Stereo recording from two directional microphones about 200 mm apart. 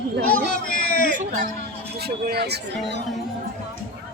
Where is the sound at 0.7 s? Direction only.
45° left (ahead or behind).